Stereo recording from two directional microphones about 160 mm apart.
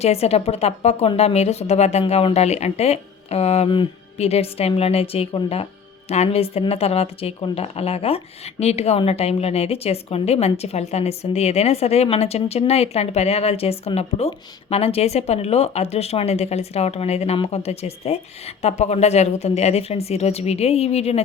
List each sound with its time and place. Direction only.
0.0 s a woman's voice: 40° left (ahead or behind)